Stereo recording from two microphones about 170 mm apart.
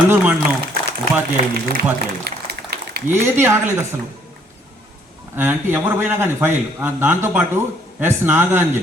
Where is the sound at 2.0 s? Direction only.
70° right (ahead or behind).